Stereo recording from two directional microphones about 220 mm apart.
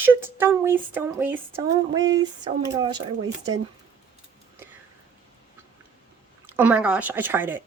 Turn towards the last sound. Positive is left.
turn(degrees=-10)  # may be behind; listen again after turning